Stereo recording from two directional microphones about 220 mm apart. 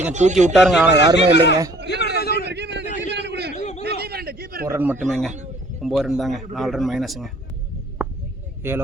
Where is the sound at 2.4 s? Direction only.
50° right (ahead or behind).